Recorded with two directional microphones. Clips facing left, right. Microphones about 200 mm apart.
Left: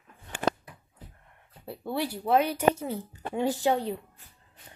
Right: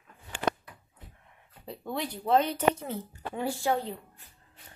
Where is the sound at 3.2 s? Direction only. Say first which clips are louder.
Left 4 dB; 20° left (ahead or behind).